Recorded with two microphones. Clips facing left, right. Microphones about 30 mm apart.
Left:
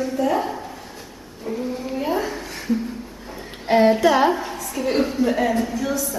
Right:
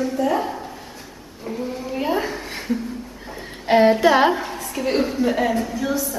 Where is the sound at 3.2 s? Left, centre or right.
Centre.